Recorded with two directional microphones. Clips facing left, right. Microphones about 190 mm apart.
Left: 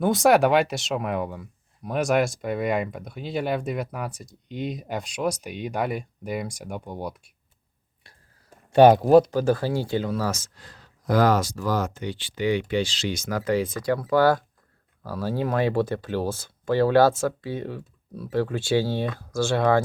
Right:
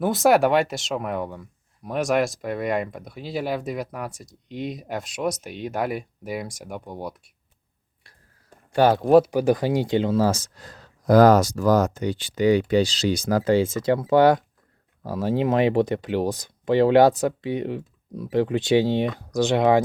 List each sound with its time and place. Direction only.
0.0 s speech: centre (ahead or behind)
8.7 s speech: 20° left (ahead or behind)
9.0 s speech: centre (ahead or behind)
9.3 s speech: 15° right (ahead or behind)